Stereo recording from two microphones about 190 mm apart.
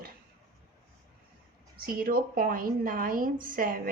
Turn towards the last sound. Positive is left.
turn(degrees=-45)  # may be behind; listen again after turning